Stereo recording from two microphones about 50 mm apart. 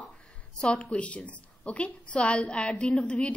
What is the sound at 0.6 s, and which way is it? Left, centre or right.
A woman's voice, left.